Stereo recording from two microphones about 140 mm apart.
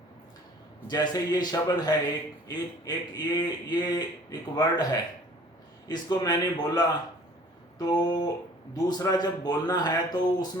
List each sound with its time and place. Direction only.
1.1 s a man's voice: 25° left (ahead or behind)